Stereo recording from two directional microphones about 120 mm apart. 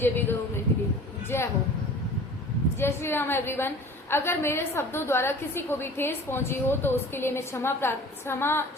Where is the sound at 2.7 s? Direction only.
20° left (ahead or behind).